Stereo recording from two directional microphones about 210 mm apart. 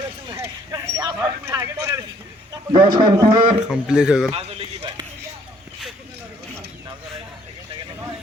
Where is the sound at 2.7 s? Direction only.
20° right (ahead or behind).